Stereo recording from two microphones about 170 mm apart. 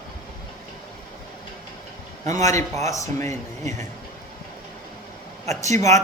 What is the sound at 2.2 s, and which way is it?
Speech, 20° left (ahead or behind).